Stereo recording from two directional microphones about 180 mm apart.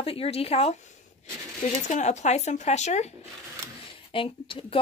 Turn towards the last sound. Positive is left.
turn(degrees=30)  # may be behind; listen again after turning